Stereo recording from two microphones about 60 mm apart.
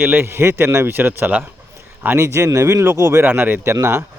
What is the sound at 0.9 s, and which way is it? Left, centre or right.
Speech, right.